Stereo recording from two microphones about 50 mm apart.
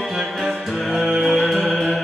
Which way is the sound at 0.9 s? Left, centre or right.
Centre.